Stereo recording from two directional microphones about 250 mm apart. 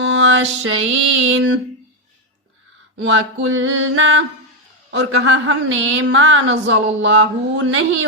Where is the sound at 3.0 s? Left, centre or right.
Right.